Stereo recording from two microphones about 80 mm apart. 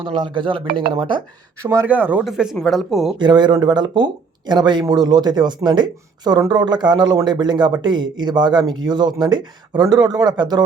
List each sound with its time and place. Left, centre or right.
0.0 s speech: right
1.6 s speech: right
1.9 s speech: right
2.2 s speech: centre
3.2 s speech: right